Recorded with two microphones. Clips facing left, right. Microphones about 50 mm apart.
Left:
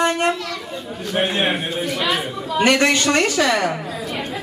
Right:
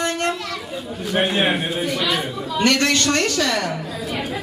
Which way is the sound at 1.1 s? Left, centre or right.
Centre.